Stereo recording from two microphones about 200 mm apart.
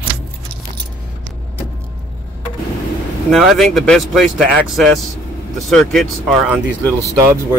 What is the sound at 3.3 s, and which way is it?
Speech, centre (ahead or behind).